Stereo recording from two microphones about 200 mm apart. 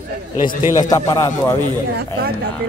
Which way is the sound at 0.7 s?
15° left (ahead or behind).